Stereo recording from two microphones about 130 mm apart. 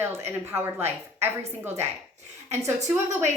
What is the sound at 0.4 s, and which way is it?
A woman's voice, 20° right (ahead or behind).